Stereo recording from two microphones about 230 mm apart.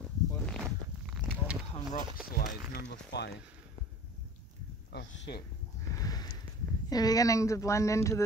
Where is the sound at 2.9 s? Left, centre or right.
Left.